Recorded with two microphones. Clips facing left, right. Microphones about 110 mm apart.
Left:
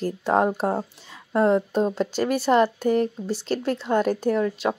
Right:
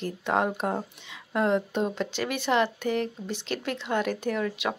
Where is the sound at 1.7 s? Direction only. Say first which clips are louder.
Left 5 dB; 40° left (ahead or behind).